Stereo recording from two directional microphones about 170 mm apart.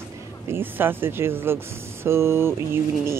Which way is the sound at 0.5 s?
10° right (ahead or behind).